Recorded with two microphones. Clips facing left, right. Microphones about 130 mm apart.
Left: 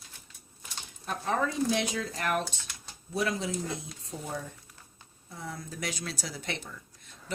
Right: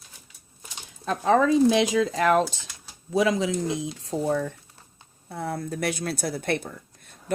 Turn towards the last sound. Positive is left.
turn(degrees=-50)  # may be behind; listen again after turning